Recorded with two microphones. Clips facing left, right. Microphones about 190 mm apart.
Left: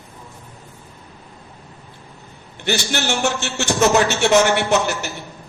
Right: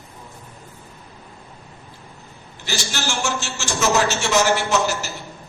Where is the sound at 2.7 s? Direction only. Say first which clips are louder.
Left 6 dB; 60° left (ahead or behind).